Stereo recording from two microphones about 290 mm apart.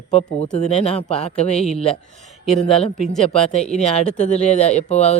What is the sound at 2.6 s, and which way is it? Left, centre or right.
A man's voice, left.